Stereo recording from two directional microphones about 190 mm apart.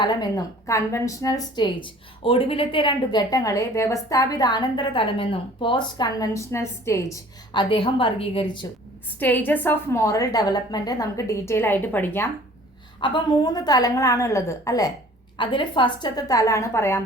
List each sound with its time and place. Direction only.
0.0 s a woman's voice: 20° left (ahead or behind)
9.1 s a woman's voice: 10° left (ahead or behind)
13.0 s a woman's voice: 25° left (ahead or behind)